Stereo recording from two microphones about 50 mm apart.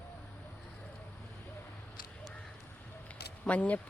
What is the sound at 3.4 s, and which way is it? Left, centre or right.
Speech, left.